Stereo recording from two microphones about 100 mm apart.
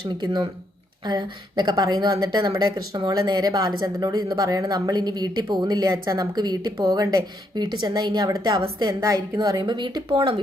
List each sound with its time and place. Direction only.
0.1 s speech: 45° right (ahead or behind)